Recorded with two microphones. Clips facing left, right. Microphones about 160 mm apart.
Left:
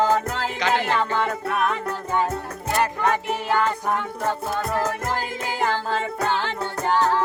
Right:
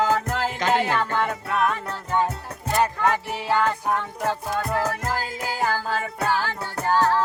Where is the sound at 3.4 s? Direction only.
10° right (ahead or behind).